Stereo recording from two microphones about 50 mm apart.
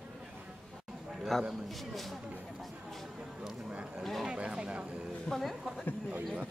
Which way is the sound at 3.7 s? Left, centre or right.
Right.